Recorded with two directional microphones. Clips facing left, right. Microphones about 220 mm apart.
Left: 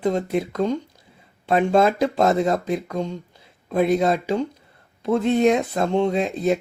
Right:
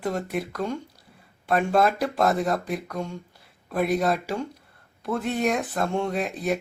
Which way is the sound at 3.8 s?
Centre (ahead or behind).